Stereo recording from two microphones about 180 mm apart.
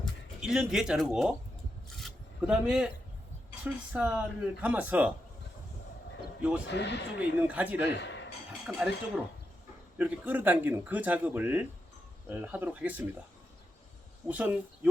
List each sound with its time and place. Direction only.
0.0 s speech: centre (ahead or behind)
2.0 s a sound: centre (ahead or behind)
3.6 s speech: 5° right (ahead or behind)
6.7 s speech: 75° left (ahead or behind)
7.2 s speech: 10° right (ahead or behind)
7.9 s speech: 75° left (ahead or behind)
8.6 s speech: 5° right (ahead or behind)
14.3 s speech: 10° right (ahead or behind)